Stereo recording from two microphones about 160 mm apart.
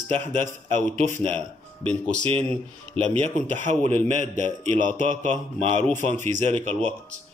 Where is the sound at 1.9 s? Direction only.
5° left (ahead or behind).